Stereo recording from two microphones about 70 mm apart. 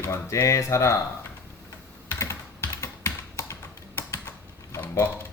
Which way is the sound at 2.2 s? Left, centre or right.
Left.